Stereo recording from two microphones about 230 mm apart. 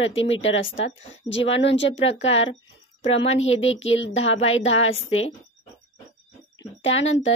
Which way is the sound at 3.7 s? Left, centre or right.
Left.